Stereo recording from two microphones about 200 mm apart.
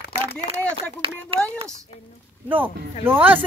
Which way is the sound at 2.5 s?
10° right (ahead or behind).